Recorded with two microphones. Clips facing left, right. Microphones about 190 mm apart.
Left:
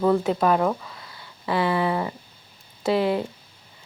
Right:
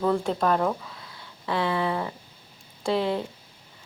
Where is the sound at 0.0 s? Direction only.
5° left (ahead or behind).